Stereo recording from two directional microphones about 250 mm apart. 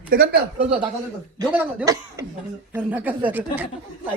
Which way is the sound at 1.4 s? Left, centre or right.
Centre.